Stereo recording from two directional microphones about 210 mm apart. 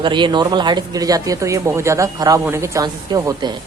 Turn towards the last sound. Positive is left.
turn(degrees=-20)  # may be behind; listen again after turning